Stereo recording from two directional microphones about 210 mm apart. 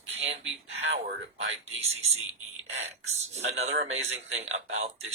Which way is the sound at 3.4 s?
70° right (ahead or behind).